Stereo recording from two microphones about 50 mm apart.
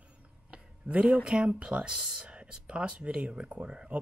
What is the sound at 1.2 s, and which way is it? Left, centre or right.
Speech, right.